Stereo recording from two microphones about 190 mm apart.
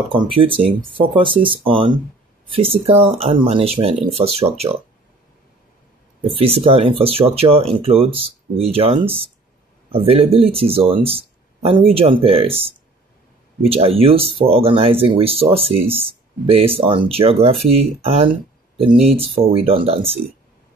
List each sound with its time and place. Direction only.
0.1 s speech: 25° right (ahead or behind)
6.2 s speech: 30° right (ahead or behind)